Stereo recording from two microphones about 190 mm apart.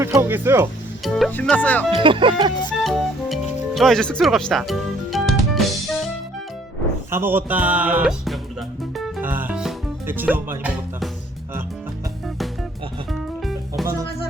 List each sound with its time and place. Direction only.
0.0 s speech: 10° right (ahead or behind)
1.0 s music: centre (ahead or behind)
1.3 s speech: 10° left (ahead or behind)
1.9 s speech: 25° right (ahead or behind)
2.8 s music: centre (ahead or behind)
7.1 s speech: 10° right (ahead or behind)
8.8 s music: centre (ahead or behind)
13.1 s music: centre (ahead or behind)